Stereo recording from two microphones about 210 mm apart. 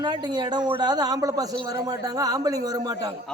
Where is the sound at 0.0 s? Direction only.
20° right (ahead or behind).